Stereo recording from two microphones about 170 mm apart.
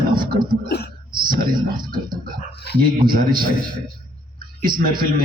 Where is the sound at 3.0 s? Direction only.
55° right (ahead or behind).